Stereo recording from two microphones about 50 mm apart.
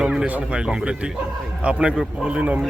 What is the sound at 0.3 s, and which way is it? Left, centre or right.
Speech, right.